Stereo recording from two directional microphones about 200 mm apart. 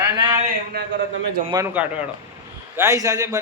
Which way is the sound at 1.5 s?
10° right (ahead or behind).